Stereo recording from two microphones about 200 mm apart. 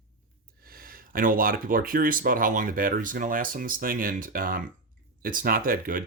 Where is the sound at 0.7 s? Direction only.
45° right (ahead or behind).